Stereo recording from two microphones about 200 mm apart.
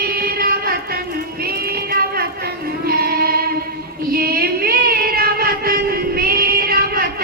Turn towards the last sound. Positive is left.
turn(degrees=-50)  # may be behind; listen again after turning